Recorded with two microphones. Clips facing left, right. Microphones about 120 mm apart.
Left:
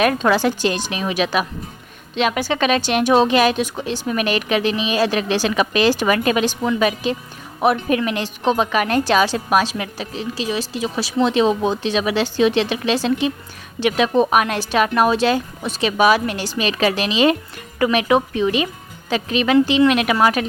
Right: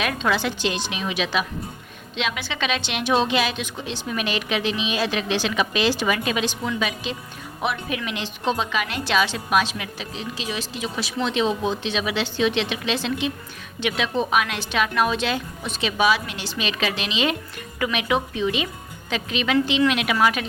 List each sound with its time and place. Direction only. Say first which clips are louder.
0.0 s a woman's voice: left 7 dB; 45° left (ahead or behind)